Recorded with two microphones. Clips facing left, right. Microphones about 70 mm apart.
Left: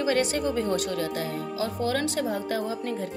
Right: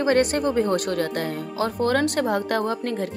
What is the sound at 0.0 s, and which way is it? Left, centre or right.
Speech, right.